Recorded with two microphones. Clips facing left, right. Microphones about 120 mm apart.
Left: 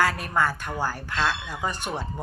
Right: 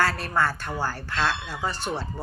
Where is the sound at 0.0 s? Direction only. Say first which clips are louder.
Even; 15° left (ahead or behind).